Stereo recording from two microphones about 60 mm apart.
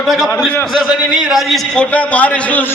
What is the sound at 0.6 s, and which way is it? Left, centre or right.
A man's voice, centre.